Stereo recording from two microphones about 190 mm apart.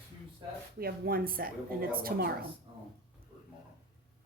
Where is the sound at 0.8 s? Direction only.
50° right (ahead or behind).